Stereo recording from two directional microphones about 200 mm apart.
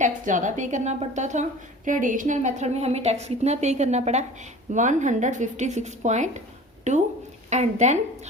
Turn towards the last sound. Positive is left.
turn(degrees=-35)  # may be behind; listen again after turning